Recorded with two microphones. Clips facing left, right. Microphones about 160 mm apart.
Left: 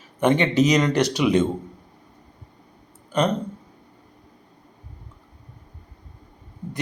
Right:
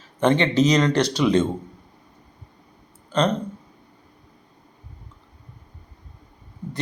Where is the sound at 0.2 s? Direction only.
15° left (ahead or behind).